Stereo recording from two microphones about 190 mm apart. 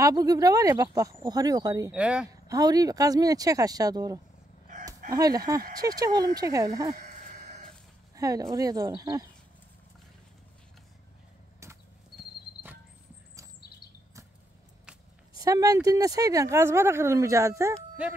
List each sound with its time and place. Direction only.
0.0 s speech: 20° right (ahead or behind)
1.9 s speech: 5° right (ahead or behind)
2.4 s speech: 20° right (ahead or behind)
7.0 s a sound: 50° right (ahead or behind)
8.2 s speech: 20° right (ahead or behind)
11.6 s a sound: 15° right (ahead or behind)
15.3 s speech: 20° right (ahead or behind)